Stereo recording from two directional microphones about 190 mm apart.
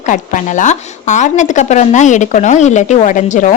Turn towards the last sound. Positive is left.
turn(degrees=40)  # may be behind; listen again after turning